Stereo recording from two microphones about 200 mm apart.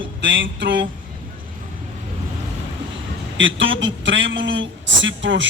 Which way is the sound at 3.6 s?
70° right (ahead or behind).